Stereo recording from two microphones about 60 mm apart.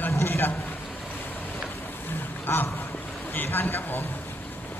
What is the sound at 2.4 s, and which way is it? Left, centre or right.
Duck, left.